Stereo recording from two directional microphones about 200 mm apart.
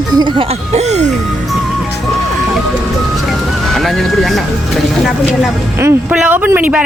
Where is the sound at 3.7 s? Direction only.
Centre (ahead or behind).